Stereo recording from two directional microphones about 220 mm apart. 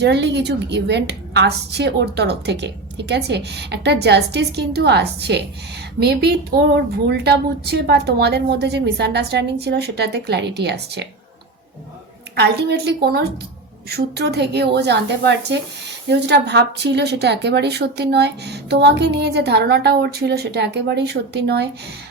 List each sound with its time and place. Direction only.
0.0 s speech: 50° right (ahead or behind)
12.4 s speech: 50° right (ahead or behind)